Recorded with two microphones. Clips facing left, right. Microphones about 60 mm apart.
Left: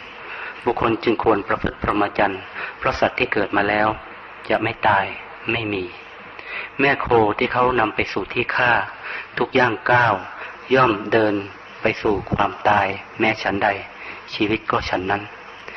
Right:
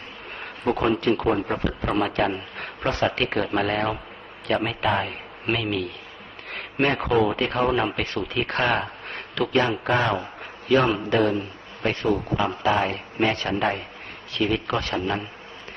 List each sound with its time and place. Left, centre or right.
0.3 s a sound: left
0.9 s a man's voice: left
2.6 s a sound: left
3.1 s a man's voice: left
3.5 s a man's voice: left
5.5 s a man's voice: left
6.5 s a sound: left
7.1 s a man's voice: left
7.4 s a man's voice: left
7.9 s a man's voice: left
12.9 s a man's voice: left
14.8 s a man's voice: left